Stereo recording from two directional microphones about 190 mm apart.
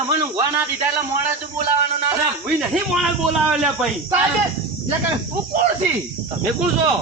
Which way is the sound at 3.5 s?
5° right (ahead or behind).